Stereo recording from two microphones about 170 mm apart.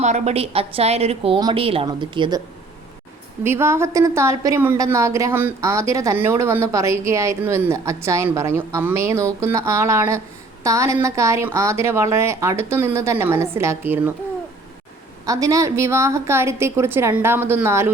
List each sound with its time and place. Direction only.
0.0 s a woman's voice: 40° right (ahead or behind)
3.4 s a woman's voice: 15° right (ahead or behind)
15.3 s a woman's voice: 20° right (ahead or behind)